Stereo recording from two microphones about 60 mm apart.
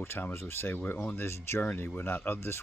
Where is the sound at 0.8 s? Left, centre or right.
Left.